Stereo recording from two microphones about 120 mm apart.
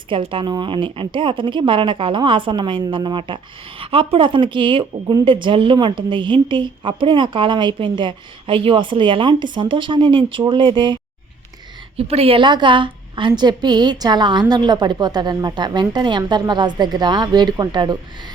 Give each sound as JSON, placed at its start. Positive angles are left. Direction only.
{"t": 0.1, "sound": "a woman's voice", "side_deg": -45}
{"t": 11.9, "sound": "a woman's voice", "side_deg": -55}